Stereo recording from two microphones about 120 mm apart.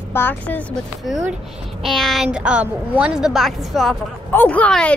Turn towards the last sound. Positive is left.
turn(degrees=10)  # may be behind; listen again after turning